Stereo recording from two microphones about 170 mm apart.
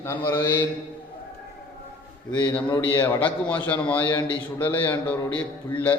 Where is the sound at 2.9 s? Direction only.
15° left (ahead or behind).